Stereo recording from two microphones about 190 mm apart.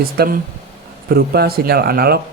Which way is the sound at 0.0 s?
50° right (ahead or behind).